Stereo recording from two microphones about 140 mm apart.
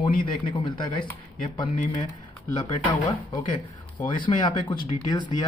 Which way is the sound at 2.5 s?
35° left (ahead or behind).